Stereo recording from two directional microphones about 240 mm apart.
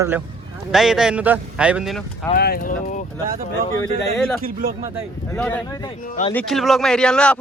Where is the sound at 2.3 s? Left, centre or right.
Left.